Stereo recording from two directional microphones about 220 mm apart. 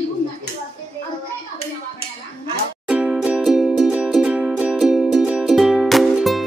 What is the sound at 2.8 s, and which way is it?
Music, 5° right (ahead or behind).